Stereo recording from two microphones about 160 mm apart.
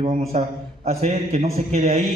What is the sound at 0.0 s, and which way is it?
Mantra, 50° right (ahead or behind).